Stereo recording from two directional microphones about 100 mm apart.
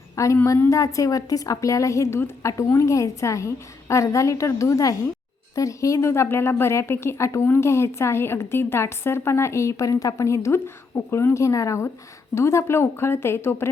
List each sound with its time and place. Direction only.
0.2 s a woman's voice: 30° left (ahead or behind)